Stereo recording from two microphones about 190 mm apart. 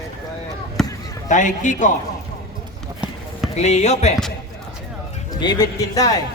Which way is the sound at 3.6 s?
35° left (ahead or behind).